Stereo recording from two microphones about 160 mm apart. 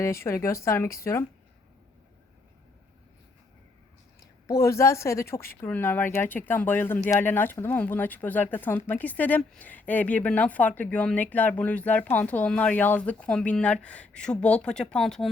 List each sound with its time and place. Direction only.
0.0 s speech: 15° left (ahead or behind)
4.4 s speech: 20° left (ahead or behind); by 15.3 s centre (ahead or behind)